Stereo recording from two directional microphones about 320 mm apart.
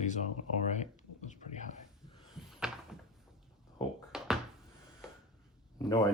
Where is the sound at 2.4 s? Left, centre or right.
Centre.